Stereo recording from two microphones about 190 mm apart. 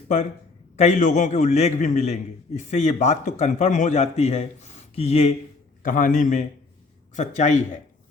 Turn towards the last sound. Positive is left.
turn(degrees=40)  # may be behind; listen again after turning